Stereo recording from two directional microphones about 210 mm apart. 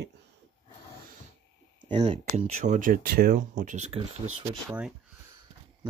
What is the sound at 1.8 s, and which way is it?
Speech, 25° right (ahead or behind).